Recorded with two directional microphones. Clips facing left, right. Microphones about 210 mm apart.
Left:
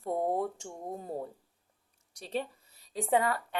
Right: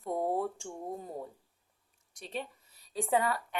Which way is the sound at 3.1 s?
25° left (ahead or behind).